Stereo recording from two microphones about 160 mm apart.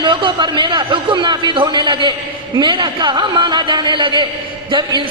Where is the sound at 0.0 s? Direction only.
30° right (ahead or behind).